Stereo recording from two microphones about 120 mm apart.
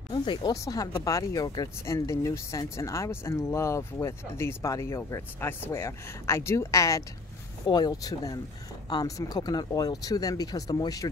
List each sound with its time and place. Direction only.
0.1 s speech: 40° left (ahead or behind)
0.6 s speech: 30° left (ahead or behind)